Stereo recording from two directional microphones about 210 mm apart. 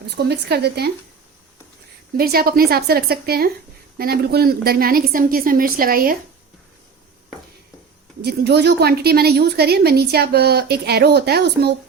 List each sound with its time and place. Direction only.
0.2 s a woman's voice: 50° right (ahead or behind)
2.1 s a woman's voice: 45° right (ahead or behind)
8.2 s a woman's voice: 50° right (ahead or behind)